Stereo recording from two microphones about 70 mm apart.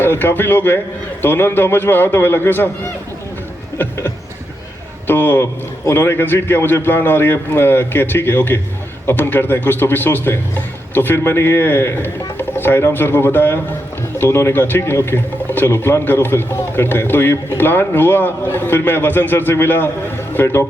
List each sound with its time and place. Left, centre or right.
0.0 s a man's voice: left
5.0 s a man's voice: left